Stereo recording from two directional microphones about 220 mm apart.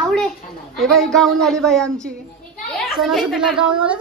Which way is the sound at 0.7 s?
Centre (ahead or behind).